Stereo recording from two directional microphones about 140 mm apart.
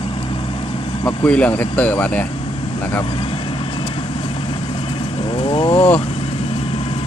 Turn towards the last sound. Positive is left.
turn(degrees=40)  # may be behind; listen again after turning